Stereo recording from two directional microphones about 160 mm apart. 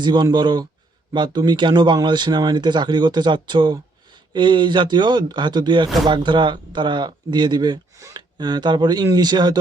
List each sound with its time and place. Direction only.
0.0 s speech: 25° right (ahead or behind)